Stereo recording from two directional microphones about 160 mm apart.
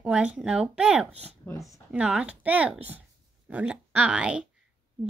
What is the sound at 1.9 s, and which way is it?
Speech, 5° right (ahead or behind).